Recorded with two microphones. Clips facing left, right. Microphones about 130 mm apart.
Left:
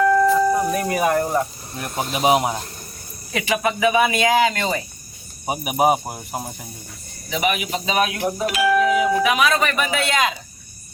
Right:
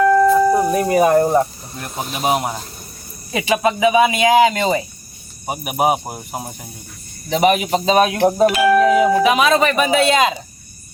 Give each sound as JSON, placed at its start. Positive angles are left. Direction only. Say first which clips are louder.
{"t": 0.0, "sound": "a sound", "louder": "right 3 dB", "side_deg": 0}
{"t": 0.7, "sound": "a sound", "louder": "right 6 dB", "side_deg": -30}
{"t": 1.7, "sound": "speech", "louder": "left 1 dB", "side_deg": 0}
{"t": 3.3, "sound": "speech", "louder": "right 4 dB", "side_deg": -25}
{"t": 5.5, "sound": "speech", "louder": "even", "side_deg": 0}
{"t": 7.3, "sound": "speech", "louder": "right 7 dB", "side_deg": -40}
{"t": 8.6, "sound": "speech", "louder": "right 2 dB", "side_deg": 0}
{"t": 8.9, "sound": "speech", "louder": "right 5 dB", "side_deg": -40}
{"t": 9.2, "sound": "speech", "louder": "right 4 dB", "side_deg": -25}